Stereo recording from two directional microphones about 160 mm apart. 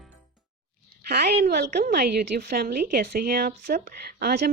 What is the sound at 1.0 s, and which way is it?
A woman's voice, 90° right.